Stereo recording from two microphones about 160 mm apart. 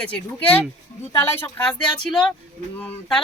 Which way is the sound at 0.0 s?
10° left (ahead or behind).